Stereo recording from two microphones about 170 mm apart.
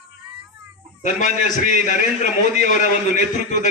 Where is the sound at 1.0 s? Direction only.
50° left (ahead or behind).